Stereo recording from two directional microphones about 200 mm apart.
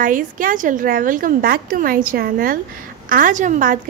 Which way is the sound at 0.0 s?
40° right (ahead or behind).